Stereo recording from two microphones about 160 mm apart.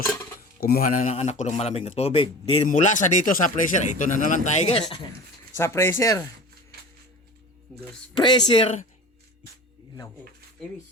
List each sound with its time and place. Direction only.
0.6 s speech: 65° left (ahead or behind)
1.0 s a man's voice: 40° left (ahead or behind)
2.6 s speech: 50° left (ahead or behind)
5.5 s speech: 15° left (ahead or behind)
8.2 s speech: 30° left (ahead or behind)